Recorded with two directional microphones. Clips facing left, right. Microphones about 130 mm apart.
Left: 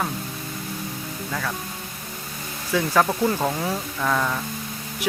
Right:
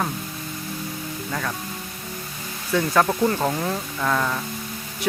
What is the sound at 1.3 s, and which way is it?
Speech, centre (ahead or behind).